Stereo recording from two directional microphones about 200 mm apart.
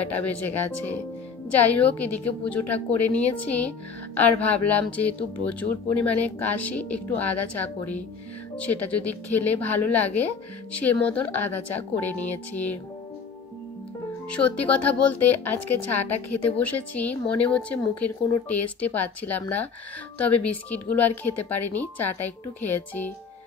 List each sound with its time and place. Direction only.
0.5 s speech: 10° left (ahead or behind)
14.3 s speech: 5° left (ahead or behind)